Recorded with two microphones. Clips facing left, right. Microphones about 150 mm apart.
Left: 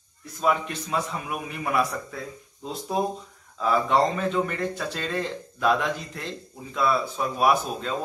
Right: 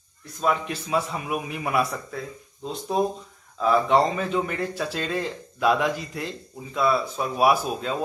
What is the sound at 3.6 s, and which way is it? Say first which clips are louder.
A man's voice: right 2 dB; centre (ahead or behind).